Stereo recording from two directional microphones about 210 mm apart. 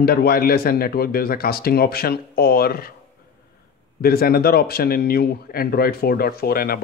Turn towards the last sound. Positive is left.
turn(degrees=45)  # may be behind; listen again after turning